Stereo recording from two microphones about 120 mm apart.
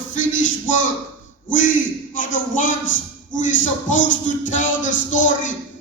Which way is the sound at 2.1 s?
90° left.